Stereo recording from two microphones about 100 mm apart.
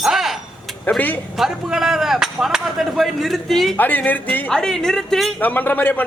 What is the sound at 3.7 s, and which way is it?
Speech, 15° left (ahead or behind).